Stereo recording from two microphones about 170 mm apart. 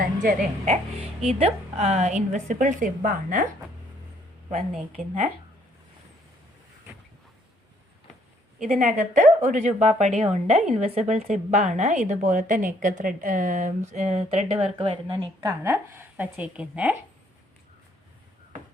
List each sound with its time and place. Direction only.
0.2 s a woman's voice: 45° right (ahead or behind)
4.5 s a woman's voice: 55° right (ahead or behind)
8.8 s a woman's voice: 45° right (ahead or behind)
15.4 s a woman's voice: 15° right (ahead or behind)